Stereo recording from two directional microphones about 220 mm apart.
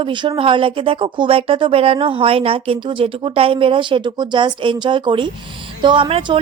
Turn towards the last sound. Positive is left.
turn(degrees=-20)  # may be behind; listen again after turning